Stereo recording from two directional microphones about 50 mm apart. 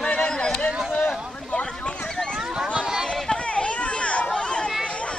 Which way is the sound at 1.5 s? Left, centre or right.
Left.